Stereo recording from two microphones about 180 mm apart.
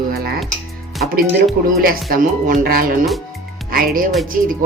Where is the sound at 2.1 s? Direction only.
55° right (ahead or behind).